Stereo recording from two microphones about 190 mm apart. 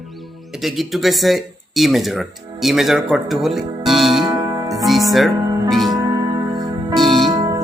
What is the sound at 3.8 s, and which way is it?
Music, centre (ahead or behind).